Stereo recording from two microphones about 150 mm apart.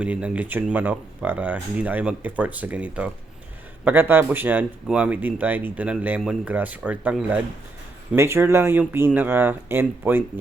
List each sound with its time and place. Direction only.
0.0 s speech: 5° right (ahead or behind)